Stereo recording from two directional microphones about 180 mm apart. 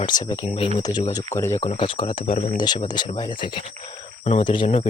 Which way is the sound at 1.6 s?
30° left (ahead or behind).